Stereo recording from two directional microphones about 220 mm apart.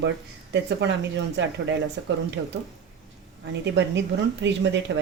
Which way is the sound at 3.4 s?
55° right (ahead or behind).